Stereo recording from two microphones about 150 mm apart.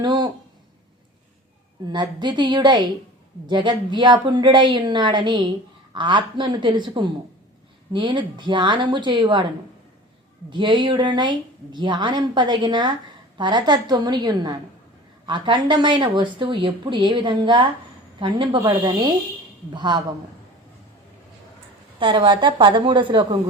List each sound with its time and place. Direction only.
0.0 s speech: 30° right (ahead or behind)
1.9 s a woman's voice: 30° right (ahead or behind)
10.5 s a woman's voice: 30° right (ahead or behind)
19.7 s a woman's voice: 30° right (ahead or behind)
21.9 s a woman's voice: 35° right (ahead or behind)